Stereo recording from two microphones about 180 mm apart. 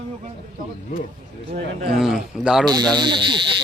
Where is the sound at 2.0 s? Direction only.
Centre (ahead or behind).